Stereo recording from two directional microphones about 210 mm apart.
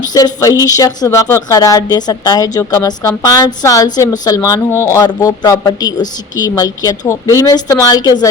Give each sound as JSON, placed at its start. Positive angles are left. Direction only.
{"t": 0.1, "sound": "speech", "side_deg": 15}